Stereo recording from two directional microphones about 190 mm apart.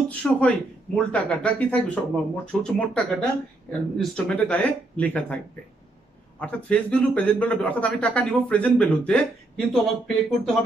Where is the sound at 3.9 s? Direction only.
5° left (ahead or behind).